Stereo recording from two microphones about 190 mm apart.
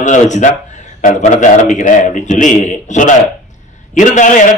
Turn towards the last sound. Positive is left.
turn(degrees=40)  # may be behind; listen again after turning